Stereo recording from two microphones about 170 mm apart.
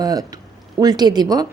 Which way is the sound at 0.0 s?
20° right (ahead or behind).